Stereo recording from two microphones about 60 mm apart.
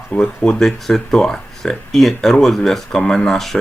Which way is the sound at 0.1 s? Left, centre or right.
Centre.